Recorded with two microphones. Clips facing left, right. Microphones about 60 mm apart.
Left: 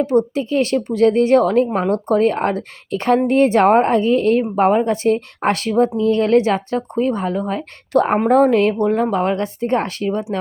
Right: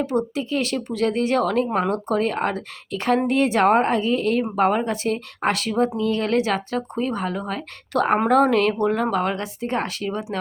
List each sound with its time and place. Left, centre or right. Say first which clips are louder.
0.3 s speech: left 6 dB; left
4.5 s speech: left 5 dB; left
9.3 s speech: left 7 dB; left